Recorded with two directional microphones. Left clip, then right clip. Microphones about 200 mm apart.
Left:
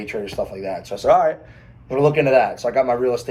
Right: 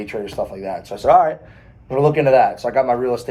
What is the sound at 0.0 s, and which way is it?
Speech, 20° right (ahead or behind).